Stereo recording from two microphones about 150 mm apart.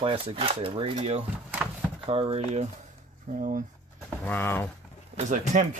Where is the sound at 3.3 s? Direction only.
60° right (ahead or behind).